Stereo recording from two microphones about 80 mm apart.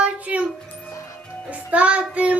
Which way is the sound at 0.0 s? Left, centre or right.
Centre.